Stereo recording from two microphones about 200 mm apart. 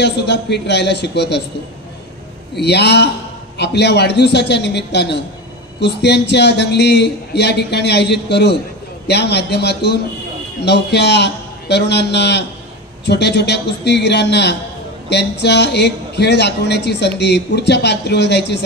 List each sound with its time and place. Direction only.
0.0 s a man's voice: 55° left (ahead or behind)
2.6 s a man's voice: 55° left (ahead or behind)